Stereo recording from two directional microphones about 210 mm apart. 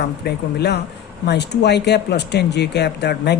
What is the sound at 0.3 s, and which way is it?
Speech, 50° left (ahead or behind).